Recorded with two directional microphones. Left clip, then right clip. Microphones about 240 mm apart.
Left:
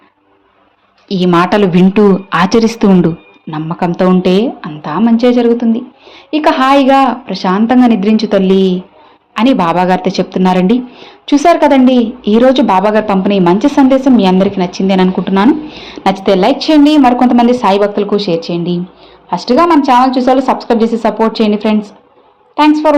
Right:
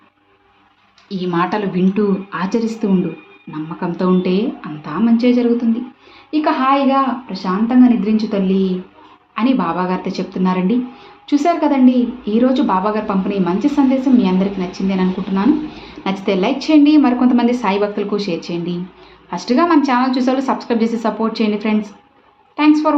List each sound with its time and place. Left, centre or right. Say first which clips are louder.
1.0 s a woman's voice: left 8 dB; left